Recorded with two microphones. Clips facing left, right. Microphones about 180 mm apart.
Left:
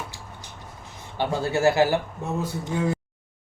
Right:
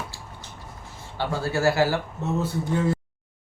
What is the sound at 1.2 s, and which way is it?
Speech, 20° left (ahead or behind).